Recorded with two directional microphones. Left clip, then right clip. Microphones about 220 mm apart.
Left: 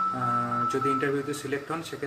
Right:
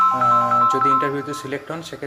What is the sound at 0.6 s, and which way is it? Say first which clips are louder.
Speech: right 10 dB; 25° right (ahead or behind).